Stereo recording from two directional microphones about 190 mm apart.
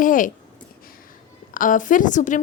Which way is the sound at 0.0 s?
45° left (ahead or behind).